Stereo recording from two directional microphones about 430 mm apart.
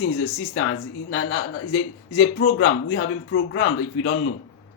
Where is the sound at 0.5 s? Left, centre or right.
Left.